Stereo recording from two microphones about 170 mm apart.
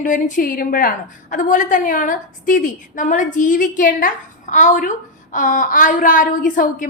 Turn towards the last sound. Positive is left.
turn(degrees=50)  # may be behind; listen again after turning